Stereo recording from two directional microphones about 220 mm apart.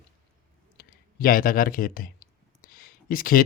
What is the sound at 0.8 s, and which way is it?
Speech, 40° left (ahead or behind).